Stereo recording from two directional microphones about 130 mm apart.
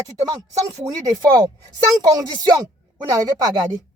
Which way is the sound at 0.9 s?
25° right (ahead or behind).